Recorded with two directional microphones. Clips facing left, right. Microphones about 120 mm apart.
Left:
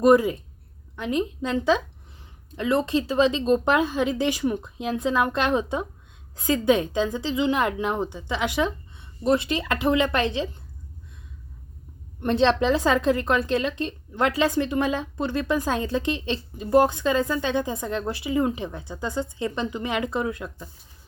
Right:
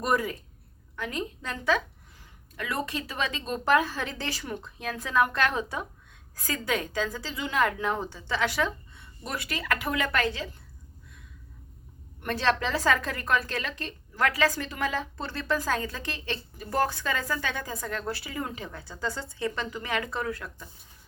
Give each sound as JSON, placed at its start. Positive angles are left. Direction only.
{"t": 0.0, "sound": "a woman's voice", "side_deg": 20}
{"t": 12.2, "sound": "a woman's voice", "side_deg": 25}